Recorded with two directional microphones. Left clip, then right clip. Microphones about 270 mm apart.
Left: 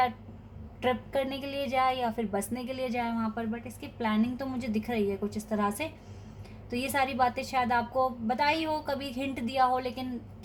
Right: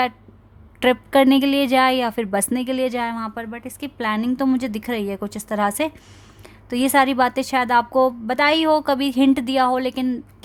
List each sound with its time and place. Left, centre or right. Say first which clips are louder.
0.8 s a woman's voice: right 13 dB; right